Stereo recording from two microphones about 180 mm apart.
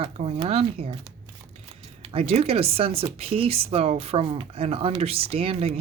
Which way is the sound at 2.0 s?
35° right (ahead or behind).